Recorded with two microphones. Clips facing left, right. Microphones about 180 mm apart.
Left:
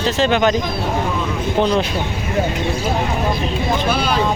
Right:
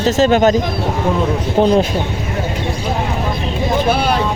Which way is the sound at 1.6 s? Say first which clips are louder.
Right 5 dB; 45° right (ahead or behind).